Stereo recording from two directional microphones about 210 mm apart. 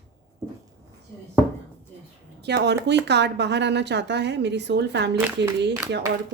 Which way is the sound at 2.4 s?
55° right (ahead or behind).